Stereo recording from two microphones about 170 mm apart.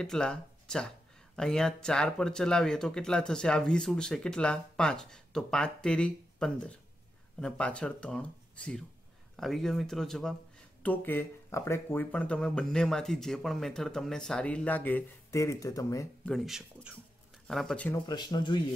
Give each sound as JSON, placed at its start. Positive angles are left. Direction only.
{"t": 0.0, "sound": "speech", "side_deg": 5}
{"t": 16.3, "sound": "speech", "side_deg": 0}
{"t": 18.0, "sound": "speech", "side_deg": 25}